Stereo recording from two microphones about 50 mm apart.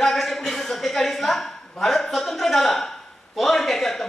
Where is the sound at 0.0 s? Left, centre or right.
Centre.